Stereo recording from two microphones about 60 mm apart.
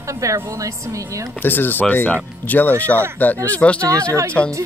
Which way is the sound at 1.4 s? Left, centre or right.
Left.